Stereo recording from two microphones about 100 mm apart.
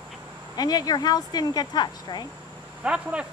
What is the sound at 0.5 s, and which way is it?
Speech, 40° left (ahead or behind).